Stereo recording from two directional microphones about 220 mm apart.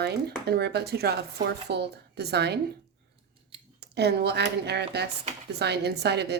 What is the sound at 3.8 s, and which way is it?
A woman's voice, 50° right (ahead or behind).